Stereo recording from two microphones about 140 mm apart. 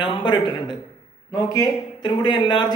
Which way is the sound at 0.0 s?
35° left (ahead or behind).